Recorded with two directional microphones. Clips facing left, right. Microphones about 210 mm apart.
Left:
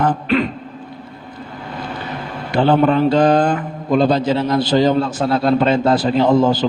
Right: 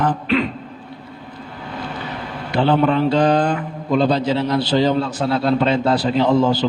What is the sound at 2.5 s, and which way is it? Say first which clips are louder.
A man's voice: left 2 dB; 45° left (ahead or behind).